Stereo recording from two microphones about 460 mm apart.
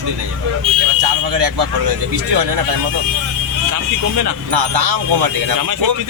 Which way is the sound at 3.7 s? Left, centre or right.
Right.